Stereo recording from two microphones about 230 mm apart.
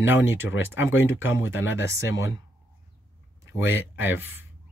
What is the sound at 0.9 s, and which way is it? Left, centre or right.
Speech, left.